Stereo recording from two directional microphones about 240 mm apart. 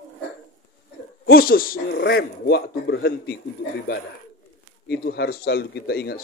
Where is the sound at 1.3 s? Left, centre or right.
Left.